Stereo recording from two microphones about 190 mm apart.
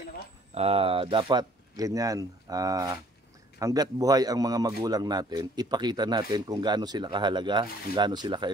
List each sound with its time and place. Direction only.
0.6 s a man's voice: 30° right (ahead or behind)